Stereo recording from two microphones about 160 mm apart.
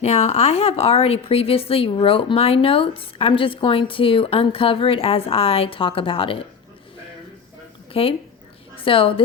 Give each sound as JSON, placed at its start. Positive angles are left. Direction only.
{"t": 0.0, "sound": "a woman's voice", "side_deg": 45}
{"t": 7.9, "sound": "a woman's voice", "side_deg": 40}